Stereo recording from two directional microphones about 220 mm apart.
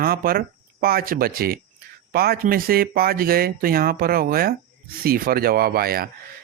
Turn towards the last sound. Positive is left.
turn(degrees=-45)  # may be behind; listen again after turning